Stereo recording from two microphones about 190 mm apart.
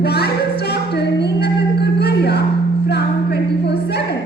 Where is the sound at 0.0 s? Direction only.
60° left (ahead or behind).